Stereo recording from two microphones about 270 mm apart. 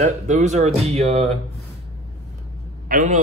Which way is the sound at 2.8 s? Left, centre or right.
Right.